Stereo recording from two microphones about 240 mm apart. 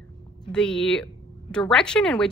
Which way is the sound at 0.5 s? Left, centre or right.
Centre.